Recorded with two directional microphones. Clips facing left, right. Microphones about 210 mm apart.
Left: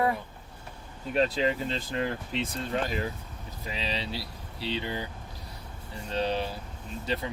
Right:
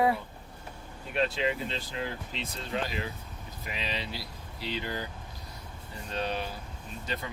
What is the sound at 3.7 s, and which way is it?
Speech, 30° left (ahead or behind).